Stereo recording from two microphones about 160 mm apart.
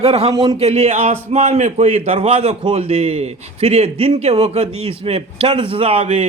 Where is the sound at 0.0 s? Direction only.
35° right (ahead or behind).